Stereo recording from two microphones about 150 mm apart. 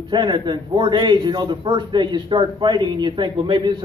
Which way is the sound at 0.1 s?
30° right (ahead or behind).